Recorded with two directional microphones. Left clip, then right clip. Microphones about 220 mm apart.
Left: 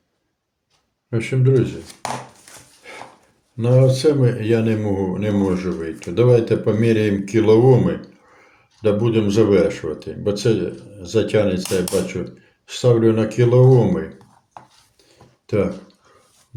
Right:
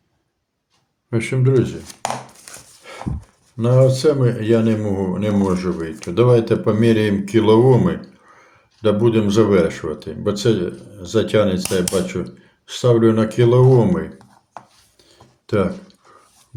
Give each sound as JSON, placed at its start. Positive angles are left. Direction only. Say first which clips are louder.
{"t": 1.1, "sound": "speech", "louder": "right 1 dB", "side_deg": -20}
{"t": 2.8, "sound": "dog", "louder": "right 1 dB", "side_deg": -5}
{"t": 3.6, "sound": "speech", "louder": "right 1 dB", "side_deg": -10}
{"t": 15.4, "sound": "speech", "louder": "right 1 dB", "side_deg": -15}